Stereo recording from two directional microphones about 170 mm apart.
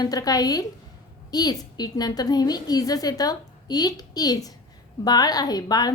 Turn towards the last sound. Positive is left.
turn(degrees=25)  # may be behind; listen again after turning